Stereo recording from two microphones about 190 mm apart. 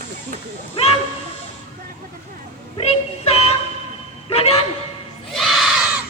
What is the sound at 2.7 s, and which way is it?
Music, 30° left (ahead or behind).